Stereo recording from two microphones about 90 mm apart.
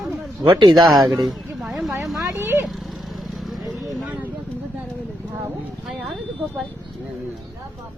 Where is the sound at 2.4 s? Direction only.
25° right (ahead or behind).